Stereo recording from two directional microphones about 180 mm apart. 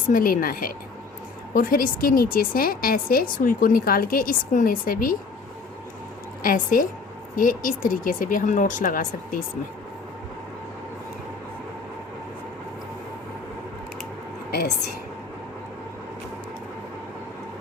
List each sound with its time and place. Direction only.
0.1 s a woman's voice: 50° left (ahead or behind)
6.4 s a woman's voice: 50° left (ahead or behind)